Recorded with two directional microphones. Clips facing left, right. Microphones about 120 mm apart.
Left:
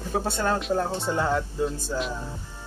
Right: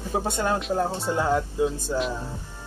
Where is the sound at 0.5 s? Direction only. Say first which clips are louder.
Even; 5° right (ahead or behind).